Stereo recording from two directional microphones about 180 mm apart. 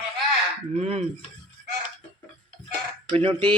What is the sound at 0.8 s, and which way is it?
Speech, 35° right (ahead or behind).